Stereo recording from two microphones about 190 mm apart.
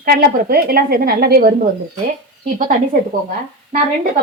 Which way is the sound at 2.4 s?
45° right (ahead or behind).